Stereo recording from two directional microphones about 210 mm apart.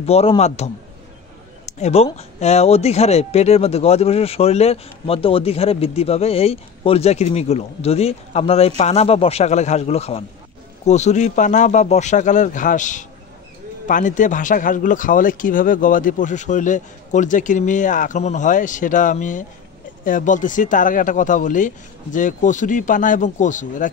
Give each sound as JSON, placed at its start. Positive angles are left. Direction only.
{"t": 0.0, "sound": "speech", "side_deg": 30}
{"t": 1.7, "sound": "speech", "side_deg": 30}